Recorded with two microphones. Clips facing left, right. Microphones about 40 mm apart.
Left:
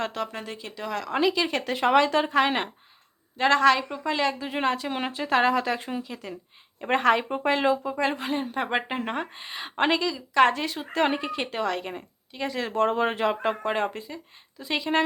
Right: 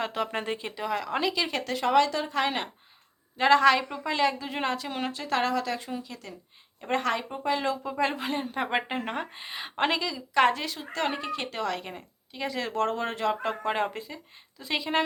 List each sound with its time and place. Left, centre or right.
0.0 s speech: centre
0.3 s speech: right
0.8 s speech: centre
1.1 s speech: centre
1.7 s speech: left
3.3 s speech: centre
4.9 s speech: left
7.6 s speech: left
7.9 s speech: centre
10.8 s a woman's voice: left; by 12.8 s centre
12.8 s speech: left
13.6 s speech: centre